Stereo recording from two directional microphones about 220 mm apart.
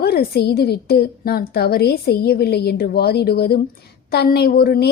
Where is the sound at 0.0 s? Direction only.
45° left (ahead or behind).